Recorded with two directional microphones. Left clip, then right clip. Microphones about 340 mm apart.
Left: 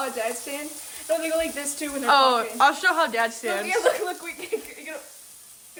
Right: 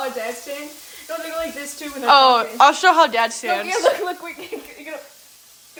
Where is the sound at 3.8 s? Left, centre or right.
Centre.